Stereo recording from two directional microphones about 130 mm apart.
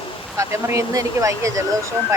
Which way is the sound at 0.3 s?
20° right (ahead or behind).